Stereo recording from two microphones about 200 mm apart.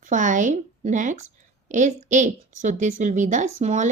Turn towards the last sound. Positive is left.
turn(degrees=-35)  # may be behind; listen again after turning